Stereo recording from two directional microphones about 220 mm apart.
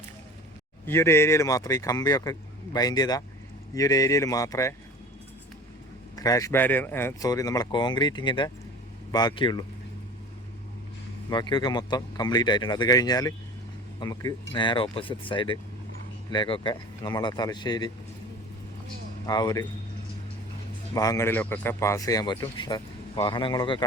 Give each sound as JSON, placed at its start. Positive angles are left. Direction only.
{"t": 0.9, "sound": "speech", "side_deg": 10}
{"t": 6.1, "sound": "speech", "side_deg": 15}
{"t": 11.3, "sound": "speech", "side_deg": 20}
{"t": 19.2, "sound": "speech", "side_deg": 15}
{"t": 20.9, "sound": "speech", "side_deg": 15}